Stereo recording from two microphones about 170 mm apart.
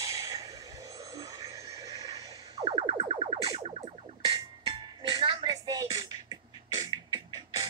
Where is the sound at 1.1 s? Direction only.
20° right (ahead or behind).